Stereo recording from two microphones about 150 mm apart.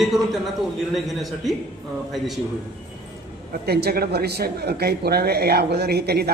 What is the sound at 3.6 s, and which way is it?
Speech, 90° right.